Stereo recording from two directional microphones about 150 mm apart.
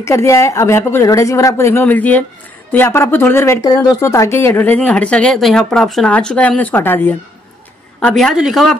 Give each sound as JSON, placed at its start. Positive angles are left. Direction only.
{"t": 0.0, "sound": "a woman's voice", "side_deg": 20}
{"t": 8.0, "sound": "a woman's voice", "side_deg": 5}